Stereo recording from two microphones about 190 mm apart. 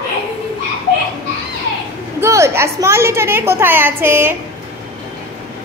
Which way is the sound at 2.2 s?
15° right (ahead or behind).